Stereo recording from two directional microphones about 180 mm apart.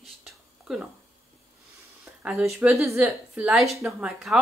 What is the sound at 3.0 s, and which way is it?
A woman's voice, 5° right (ahead or behind).